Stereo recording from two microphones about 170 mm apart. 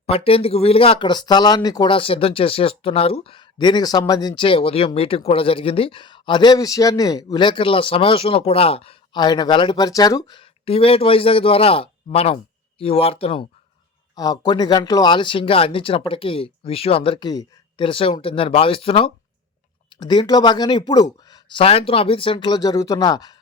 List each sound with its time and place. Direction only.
0.0 s speech: 35° left (ahead or behind)
21.6 s speech: 35° left (ahead or behind)